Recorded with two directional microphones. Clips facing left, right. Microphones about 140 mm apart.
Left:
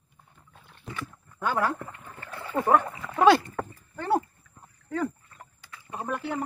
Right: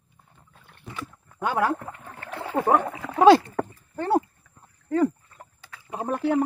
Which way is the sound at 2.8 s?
70° right (ahead or behind).